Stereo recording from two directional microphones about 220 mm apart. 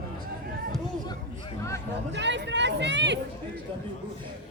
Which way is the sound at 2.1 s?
55° right (ahead or behind).